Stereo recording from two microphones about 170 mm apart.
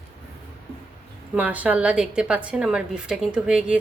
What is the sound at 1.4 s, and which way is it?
A woman's voice, 10° right (ahead or behind).